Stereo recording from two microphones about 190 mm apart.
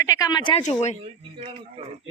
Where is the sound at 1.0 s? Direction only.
30° right (ahead or behind).